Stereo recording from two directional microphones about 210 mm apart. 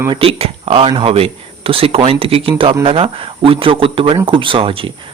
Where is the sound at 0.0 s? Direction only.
25° right (ahead or behind).